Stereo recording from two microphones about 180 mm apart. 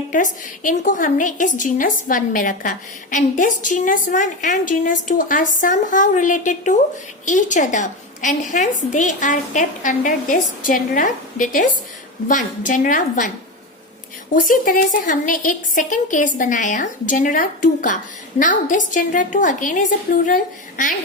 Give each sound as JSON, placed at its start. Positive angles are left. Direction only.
{"t": 0.1, "sound": "a woman's voice", "side_deg": 45}
{"t": 14.3, "sound": "a woman's voice", "side_deg": 50}